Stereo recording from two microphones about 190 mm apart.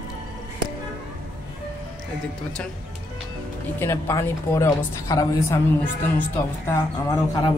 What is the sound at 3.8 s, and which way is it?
Speech, 15° left (ahead or behind).